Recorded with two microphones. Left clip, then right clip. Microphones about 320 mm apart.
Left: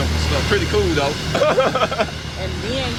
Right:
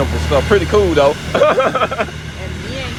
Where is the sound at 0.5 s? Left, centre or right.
Centre.